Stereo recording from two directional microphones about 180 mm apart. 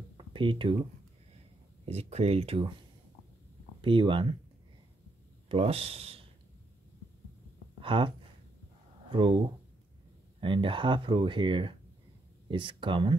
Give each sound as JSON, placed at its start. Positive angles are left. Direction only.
{"t": 0.3, "sound": "speech", "side_deg": -30}
{"t": 1.9, "sound": "speech", "side_deg": -35}
{"t": 3.8, "sound": "speech", "side_deg": -30}
{"t": 5.5, "sound": "speech", "side_deg": -35}
{"t": 7.8, "sound": "speech", "side_deg": -30}
{"t": 9.1, "sound": "speech", "side_deg": -30}
{"t": 10.4, "sound": "speech", "side_deg": -30}